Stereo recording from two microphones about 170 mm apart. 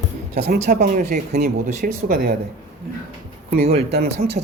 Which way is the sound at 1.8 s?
60° right (ahead or behind).